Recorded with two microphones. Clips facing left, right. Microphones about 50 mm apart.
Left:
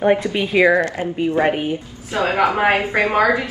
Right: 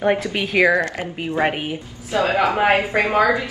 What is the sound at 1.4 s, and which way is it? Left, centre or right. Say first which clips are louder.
Speech: even; centre.